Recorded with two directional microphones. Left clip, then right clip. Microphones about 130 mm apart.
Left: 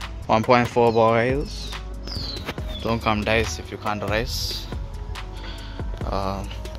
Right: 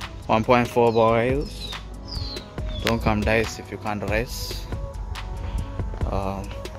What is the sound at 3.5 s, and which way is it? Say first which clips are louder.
Speech: left 2 dB; 10° right (ahead or behind).